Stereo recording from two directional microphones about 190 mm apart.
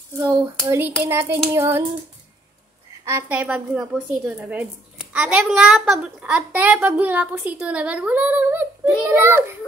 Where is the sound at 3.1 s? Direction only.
10° right (ahead or behind).